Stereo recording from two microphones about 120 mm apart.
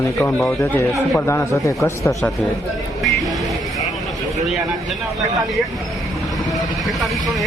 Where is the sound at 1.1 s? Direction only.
25° left (ahead or behind).